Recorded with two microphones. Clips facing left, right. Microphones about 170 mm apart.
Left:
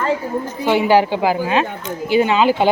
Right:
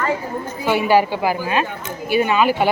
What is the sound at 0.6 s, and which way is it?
A woman's voice, 20° left (ahead or behind).